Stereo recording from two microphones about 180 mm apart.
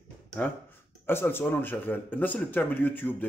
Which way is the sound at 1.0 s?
10° left (ahead or behind).